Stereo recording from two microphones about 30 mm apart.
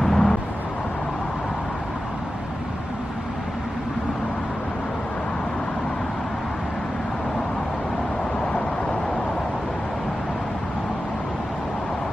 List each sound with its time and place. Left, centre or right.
0.0 s vehicle: centre